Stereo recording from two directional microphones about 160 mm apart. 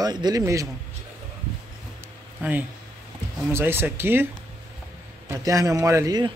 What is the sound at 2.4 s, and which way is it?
Speech, 10° right (ahead or behind).